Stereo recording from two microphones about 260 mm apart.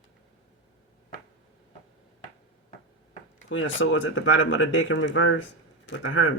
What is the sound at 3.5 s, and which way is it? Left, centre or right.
Speech, left.